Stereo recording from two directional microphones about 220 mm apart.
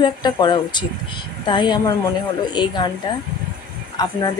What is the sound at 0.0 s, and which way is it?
Female singing, 20° left (ahead or behind).